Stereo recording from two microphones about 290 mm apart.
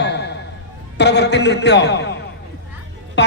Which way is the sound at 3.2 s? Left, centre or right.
Left.